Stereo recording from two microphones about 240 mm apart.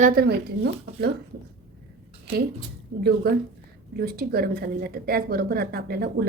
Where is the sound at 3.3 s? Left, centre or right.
Right.